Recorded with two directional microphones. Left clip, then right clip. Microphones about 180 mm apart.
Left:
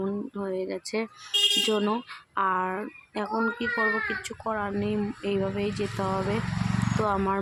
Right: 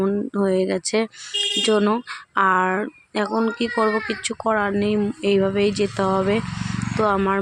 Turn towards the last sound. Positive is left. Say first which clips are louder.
# right 6 dB
turn(degrees=-25)  # may be behind; listen again after turning